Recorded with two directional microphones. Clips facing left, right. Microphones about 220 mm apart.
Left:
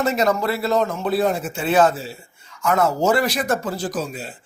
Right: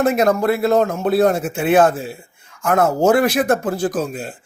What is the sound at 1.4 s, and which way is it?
A man's voice, 60° right (ahead or behind).